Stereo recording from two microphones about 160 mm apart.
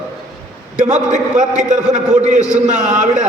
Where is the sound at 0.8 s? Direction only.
50° right (ahead or behind).